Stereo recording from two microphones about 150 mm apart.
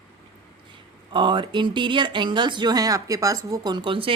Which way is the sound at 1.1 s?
30° right (ahead or behind).